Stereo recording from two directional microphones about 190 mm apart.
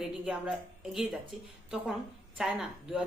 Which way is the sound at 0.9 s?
Centre (ahead or behind).